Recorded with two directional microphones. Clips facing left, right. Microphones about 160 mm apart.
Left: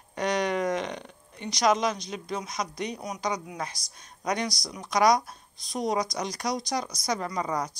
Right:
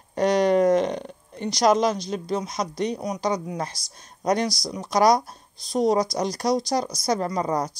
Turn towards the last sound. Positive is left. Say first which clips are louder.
# right 5 dB
turn(degrees=-35)  # may be behind; listen again after turning